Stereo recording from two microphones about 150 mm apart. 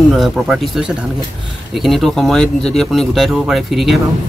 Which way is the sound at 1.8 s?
Centre (ahead or behind).